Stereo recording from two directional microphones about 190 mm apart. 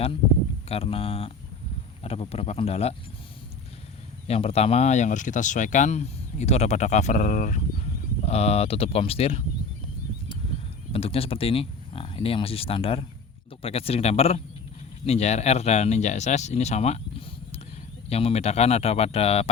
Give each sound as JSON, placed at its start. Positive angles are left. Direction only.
{"t": 0.7, "sound": "speech", "side_deg": 30}
{"t": 4.3, "sound": "speech", "side_deg": 30}
{"t": 10.9, "sound": "speech", "side_deg": 30}